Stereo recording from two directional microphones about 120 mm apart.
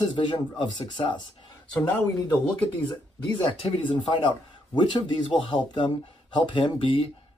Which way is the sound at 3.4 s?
45° left (ahead or behind).